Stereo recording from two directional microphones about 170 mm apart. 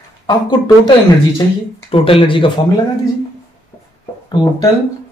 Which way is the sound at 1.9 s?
30° left (ahead or behind).